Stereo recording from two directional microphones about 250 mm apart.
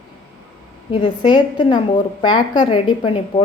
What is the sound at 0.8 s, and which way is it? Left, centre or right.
A woman's voice, centre.